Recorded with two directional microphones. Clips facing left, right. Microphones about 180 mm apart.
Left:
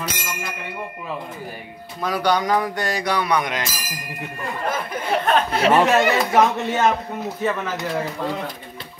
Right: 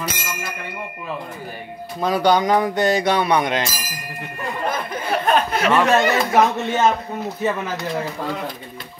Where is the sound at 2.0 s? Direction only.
25° right (ahead or behind).